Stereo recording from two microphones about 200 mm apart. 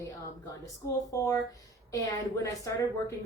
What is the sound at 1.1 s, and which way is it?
Speech, 15° left (ahead or behind).